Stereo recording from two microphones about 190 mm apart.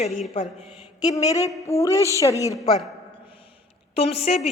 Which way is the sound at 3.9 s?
35° left (ahead or behind).